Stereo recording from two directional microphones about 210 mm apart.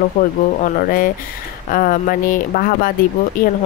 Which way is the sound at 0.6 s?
40° left (ahead or behind).